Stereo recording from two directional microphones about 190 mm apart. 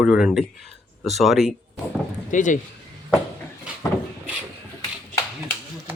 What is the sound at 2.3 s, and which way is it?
Speech, 40° left (ahead or behind).